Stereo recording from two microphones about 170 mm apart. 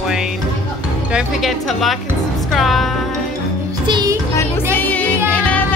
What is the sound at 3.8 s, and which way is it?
Music, 25° right (ahead or behind).